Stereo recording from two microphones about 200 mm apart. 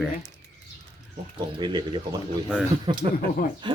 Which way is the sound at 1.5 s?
20° right (ahead or behind).